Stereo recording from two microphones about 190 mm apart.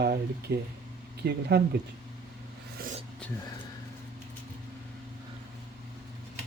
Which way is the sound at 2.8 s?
50° right (ahead or behind).